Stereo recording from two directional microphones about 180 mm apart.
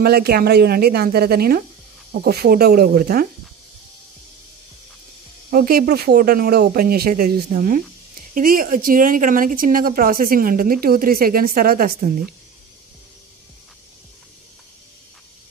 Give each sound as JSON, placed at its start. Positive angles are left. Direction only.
{"t": 0.0, "sound": "speech", "side_deg": -60}
{"t": 5.5, "sound": "speech", "side_deg": -55}